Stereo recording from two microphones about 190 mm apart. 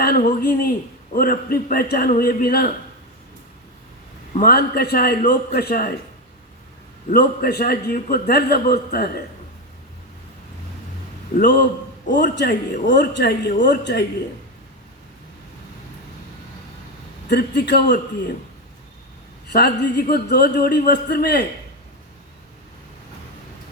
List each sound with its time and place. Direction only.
0.0 s a man's voice: 45° left (ahead or behind)
4.4 s a man's voice: 55° left (ahead or behind)
7.1 s a man's voice: 55° left (ahead or behind)
11.3 s a man's voice: 60° left (ahead or behind)
17.2 s a man's voice: 60° left (ahead or behind)
19.5 s a man's voice: 60° left (ahead or behind)